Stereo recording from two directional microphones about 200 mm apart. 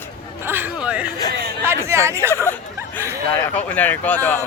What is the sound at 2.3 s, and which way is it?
Hubbub, 10° left (ahead or behind).